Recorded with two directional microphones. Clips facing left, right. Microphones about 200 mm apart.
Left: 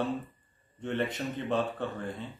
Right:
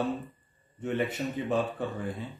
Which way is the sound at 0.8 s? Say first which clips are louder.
Right 2 dB; 10° right (ahead or behind).